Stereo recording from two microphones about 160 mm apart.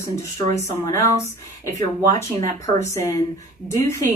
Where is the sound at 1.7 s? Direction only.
45° right (ahead or behind).